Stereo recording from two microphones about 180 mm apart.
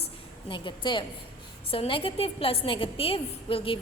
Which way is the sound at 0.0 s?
30° left (ahead or behind).